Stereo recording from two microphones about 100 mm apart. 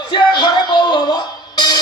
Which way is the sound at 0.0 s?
50° left (ahead or behind).